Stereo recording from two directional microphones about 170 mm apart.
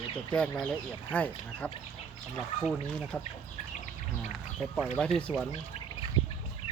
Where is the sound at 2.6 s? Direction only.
5° right (ahead or behind).